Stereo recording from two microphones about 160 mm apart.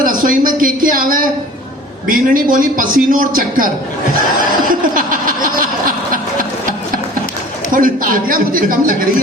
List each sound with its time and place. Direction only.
0.0 s a sound: 60° right (ahead or behind)
2.0 s a man's voice: 60° right (ahead or behind)
4.7 s a man's voice: 60° right (ahead or behind)
7.7 s a man's voice: 60° right (ahead or behind)